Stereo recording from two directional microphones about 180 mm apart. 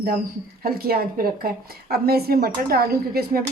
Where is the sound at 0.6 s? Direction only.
55° right (ahead or behind).